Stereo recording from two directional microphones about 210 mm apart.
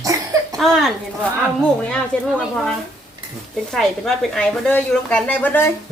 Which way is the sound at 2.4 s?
Centre (ahead or behind).